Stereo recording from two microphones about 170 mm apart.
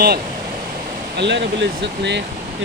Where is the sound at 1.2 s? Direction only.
90° right.